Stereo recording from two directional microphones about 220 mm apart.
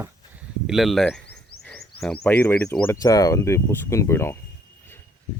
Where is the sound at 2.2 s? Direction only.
5° left (ahead or behind).